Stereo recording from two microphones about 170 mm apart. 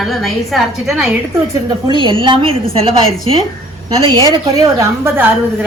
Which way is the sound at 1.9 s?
30° right (ahead or behind).